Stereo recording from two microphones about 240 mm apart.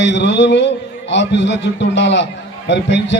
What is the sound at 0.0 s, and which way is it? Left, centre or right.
A man's voice, left.